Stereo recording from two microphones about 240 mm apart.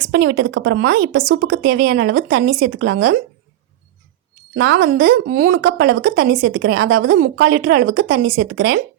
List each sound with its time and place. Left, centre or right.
0.0 s a woman's voice: right
1.4 s a woman's voice: right
1.6 s a woman's voice: right
2.6 s a woman's voice: right
4.5 s a woman's voice: right